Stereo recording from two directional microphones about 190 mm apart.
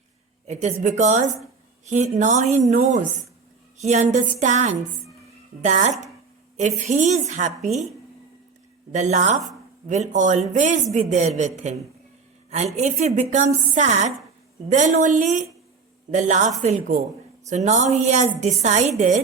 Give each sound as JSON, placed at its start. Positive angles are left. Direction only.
{"t": 0.4, "sound": "a woman's voice", "side_deg": -35}
{"t": 8.9, "sound": "a woman's voice", "side_deg": -40}